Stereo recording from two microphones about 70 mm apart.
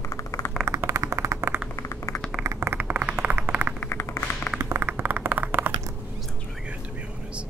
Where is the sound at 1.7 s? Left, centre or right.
Left.